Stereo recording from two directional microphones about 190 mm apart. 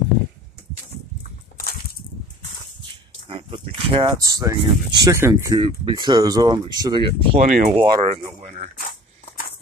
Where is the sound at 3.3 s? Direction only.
30° right (ahead or behind).